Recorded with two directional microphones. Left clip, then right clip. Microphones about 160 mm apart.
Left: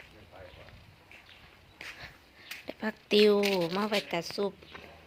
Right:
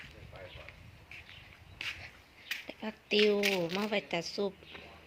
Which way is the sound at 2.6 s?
25° left (ahead or behind).